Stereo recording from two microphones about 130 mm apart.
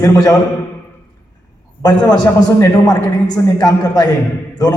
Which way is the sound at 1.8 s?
30° left (ahead or behind).